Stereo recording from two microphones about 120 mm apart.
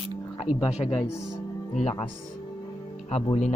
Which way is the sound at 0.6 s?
55° left (ahead or behind).